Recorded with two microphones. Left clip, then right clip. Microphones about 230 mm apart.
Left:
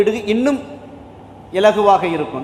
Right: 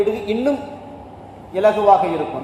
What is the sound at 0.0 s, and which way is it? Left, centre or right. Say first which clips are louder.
Speech: left 3 dB; left.